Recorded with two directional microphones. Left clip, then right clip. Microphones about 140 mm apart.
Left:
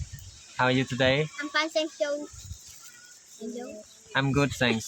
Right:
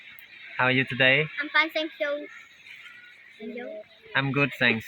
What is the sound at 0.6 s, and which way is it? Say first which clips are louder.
Speech: right 3 dB; 15° left (ahead or behind).